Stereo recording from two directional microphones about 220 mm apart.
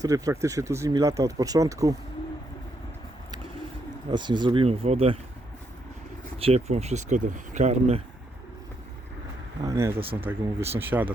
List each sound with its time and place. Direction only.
0.0 s speech: 15° right (ahead or behind)
4.1 s speech: 20° right (ahead or behind)
6.4 s speech: 30° right (ahead or behind)
9.6 s speech: 15° right (ahead or behind)
10.0 s speech: 25° right (ahead or behind)
10.2 s speech: 10° right (ahead or behind)